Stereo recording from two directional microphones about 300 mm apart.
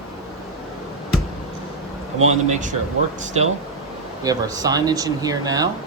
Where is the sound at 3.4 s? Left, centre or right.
Right.